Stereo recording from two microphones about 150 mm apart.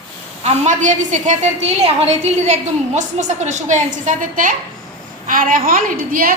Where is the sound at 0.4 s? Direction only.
50° right (ahead or behind).